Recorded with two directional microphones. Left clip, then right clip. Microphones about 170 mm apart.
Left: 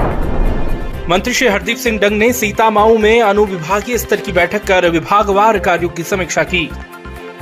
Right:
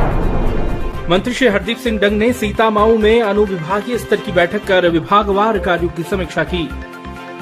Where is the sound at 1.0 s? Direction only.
20° left (ahead or behind).